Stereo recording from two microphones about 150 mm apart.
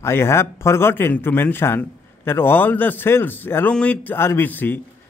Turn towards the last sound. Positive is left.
turn(degrees=10)  # may be behind; listen again after turning